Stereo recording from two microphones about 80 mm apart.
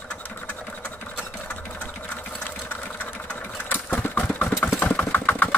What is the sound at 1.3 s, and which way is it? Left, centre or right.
Sewing machine, left.